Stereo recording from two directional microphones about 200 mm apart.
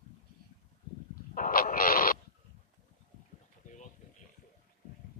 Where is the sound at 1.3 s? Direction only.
45° left (ahead or behind).